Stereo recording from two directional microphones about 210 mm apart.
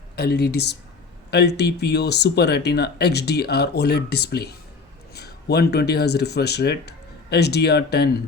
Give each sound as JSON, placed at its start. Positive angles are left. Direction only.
{"t": 0.2, "sound": "speech", "side_deg": 50}